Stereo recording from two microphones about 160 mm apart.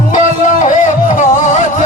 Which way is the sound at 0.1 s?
55° left (ahead or behind).